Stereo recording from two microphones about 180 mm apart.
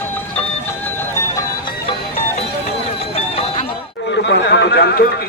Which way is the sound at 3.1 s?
35° left (ahead or behind).